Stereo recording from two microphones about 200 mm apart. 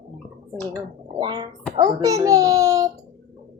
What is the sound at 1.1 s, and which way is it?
A child's voice, 20° right (ahead or behind).